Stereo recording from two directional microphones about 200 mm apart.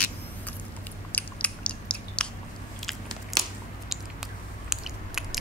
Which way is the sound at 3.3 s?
Centre (ahead or behind).